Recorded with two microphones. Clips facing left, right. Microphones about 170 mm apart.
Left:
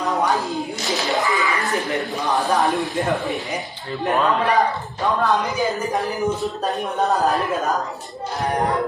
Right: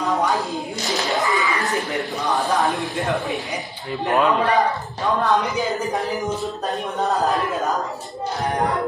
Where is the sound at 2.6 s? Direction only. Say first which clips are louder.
Left 2 dB; centre (ahead or behind).